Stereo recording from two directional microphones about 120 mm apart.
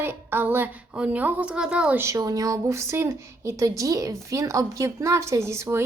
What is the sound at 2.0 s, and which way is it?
A woman's voice, 25° right (ahead or behind).